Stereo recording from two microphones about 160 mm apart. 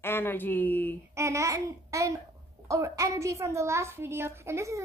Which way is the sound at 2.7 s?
20° right (ahead or behind).